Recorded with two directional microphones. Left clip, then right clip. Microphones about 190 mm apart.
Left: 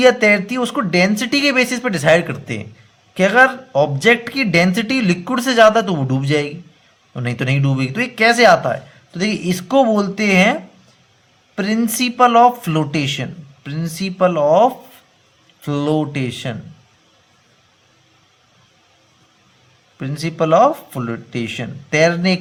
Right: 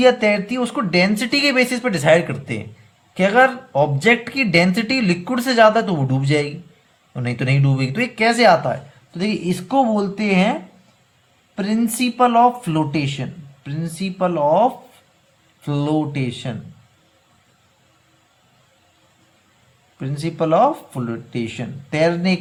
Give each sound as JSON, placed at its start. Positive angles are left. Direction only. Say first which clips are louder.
{"t": 0.0, "sound": "speech", "louder": "left 3 dB", "side_deg": 30}
{"t": 20.0, "sound": "speech", "louder": "left 3 dB", "side_deg": 30}